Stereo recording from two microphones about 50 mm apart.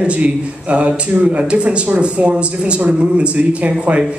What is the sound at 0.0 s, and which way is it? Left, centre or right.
Speech, right.